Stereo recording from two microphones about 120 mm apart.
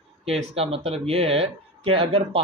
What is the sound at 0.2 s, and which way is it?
Speech, 60° right (ahead or behind).